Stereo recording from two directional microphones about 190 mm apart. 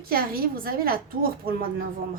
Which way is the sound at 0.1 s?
50° right (ahead or behind).